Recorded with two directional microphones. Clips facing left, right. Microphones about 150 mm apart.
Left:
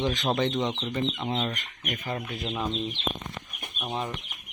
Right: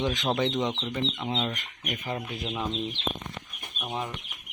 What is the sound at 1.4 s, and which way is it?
Speech, 10° right (ahead or behind).